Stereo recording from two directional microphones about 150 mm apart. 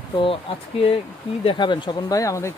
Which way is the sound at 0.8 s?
40° left (ahead or behind).